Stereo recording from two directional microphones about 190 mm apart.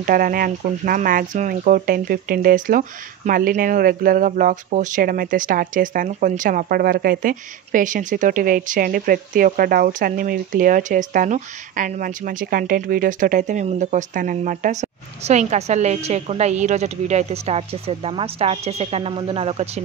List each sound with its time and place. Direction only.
0.0 s speech: 50° right (ahead or behind)